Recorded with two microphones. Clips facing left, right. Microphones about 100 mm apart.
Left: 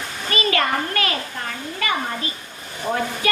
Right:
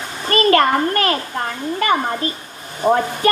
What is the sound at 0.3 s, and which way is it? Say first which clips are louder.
A child's voice: right 8 dB; 45° right (ahead or behind).